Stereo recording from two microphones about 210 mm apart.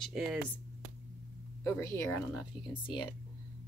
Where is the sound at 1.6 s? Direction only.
10° left (ahead or behind).